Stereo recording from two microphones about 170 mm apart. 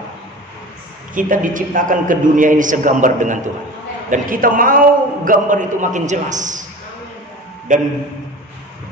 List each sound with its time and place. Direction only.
1.1 s a man's voice: 50° right (ahead or behind)